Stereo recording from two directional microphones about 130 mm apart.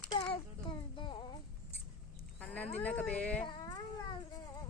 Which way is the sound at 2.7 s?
10° left (ahead or behind).